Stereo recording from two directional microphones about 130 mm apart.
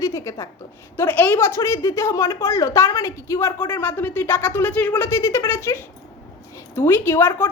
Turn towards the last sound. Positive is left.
turn(degrees=15)  # may be behind; listen again after turning